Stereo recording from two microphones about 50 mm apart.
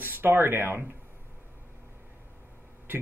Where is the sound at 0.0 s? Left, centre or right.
Right.